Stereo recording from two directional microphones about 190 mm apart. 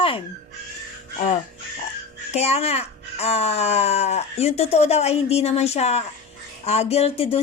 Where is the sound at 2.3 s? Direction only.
35° left (ahead or behind).